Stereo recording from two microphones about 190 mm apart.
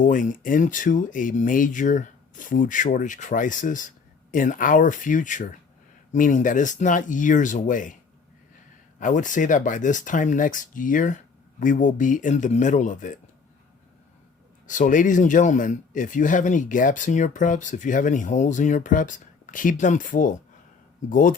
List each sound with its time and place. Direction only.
0.0 s speech: 45° left (ahead or behind)
9.0 s speech: 40° left (ahead or behind)
14.7 s speech: 45° left (ahead or behind)